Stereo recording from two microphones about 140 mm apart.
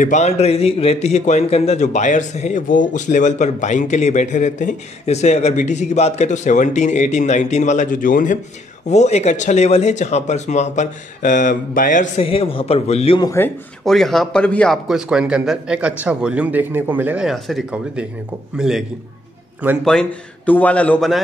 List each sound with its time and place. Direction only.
0.0 s speech: 55° left (ahead or behind)
8.8 s speech: 55° left (ahead or behind); by 12.1 s 70° left (ahead or behind)
12.2 s a man's voice: 40° left (ahead or behind)
13.2 s speech: 20° left (ahead or behind)
13.8 s a man's voice: centre (ahead or behind)